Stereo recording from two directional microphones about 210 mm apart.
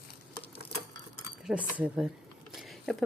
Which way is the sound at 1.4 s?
5° right (ahead or behind).